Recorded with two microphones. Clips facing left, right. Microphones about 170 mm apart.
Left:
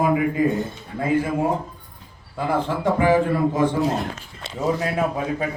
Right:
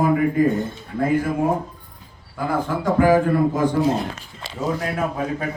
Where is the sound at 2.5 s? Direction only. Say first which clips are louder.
Right 2 dB; 25° left (ahead or behind).